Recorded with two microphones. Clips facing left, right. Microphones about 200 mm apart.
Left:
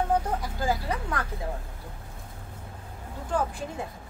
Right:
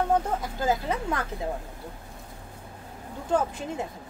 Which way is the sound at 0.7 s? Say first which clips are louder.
Right 3 dB; 20° right (ahead or behind).